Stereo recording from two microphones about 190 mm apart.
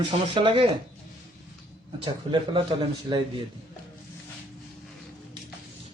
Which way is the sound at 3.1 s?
25° right (ahead or behind).